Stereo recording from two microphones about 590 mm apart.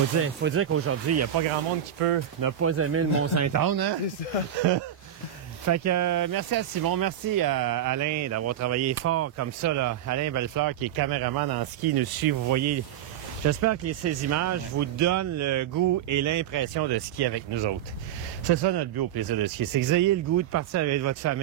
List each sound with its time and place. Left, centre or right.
0.2 s speech: right
2.0 s speech: right
2.4 s speech: right
5.7 s speech: right